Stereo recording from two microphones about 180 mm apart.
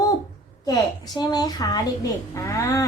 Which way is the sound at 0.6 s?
20° left (ahead or behind).